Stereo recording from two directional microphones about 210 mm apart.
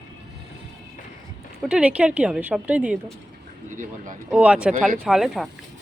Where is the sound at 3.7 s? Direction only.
40° right (ahead or behind).